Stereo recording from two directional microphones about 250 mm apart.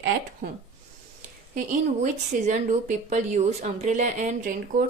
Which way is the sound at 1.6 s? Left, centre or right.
Right.